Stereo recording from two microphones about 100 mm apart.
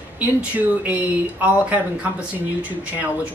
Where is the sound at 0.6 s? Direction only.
15° right (ahead or behind).